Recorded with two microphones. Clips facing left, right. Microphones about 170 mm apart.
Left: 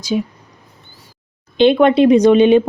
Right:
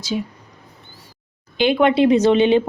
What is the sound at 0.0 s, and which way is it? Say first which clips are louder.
Speech: left 5 dB; 15° left (ahead or behind).